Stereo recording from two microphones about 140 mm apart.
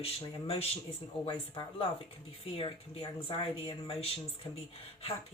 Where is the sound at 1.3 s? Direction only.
35° left (ahead or behind).